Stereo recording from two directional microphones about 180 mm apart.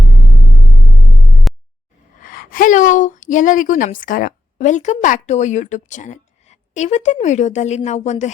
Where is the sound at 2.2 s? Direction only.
50° left (ahead or behind).